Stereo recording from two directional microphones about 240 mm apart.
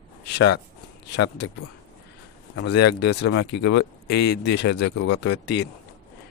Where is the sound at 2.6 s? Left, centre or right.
Left.